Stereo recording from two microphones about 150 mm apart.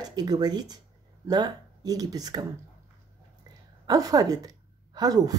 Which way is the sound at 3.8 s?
25° right (ahead or behind).